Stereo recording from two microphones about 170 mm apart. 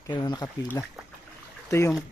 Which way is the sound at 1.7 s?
15° left (ahead or behind).